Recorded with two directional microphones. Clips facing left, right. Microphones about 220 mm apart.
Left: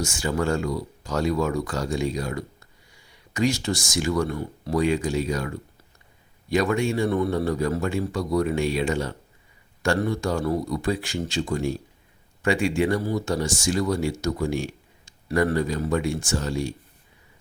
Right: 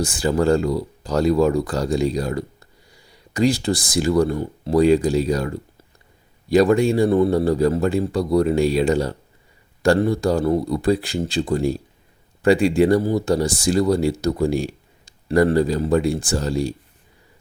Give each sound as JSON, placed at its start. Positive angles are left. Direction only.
{"t": 0.0, "sound": "speech", "side_deg": -35}